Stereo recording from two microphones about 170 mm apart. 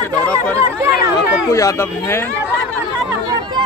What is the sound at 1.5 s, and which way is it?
Speech, 20° left (ahead or behind).